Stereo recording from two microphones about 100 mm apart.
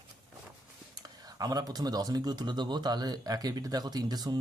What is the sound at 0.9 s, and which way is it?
Speech, 40° right (ahead or behind).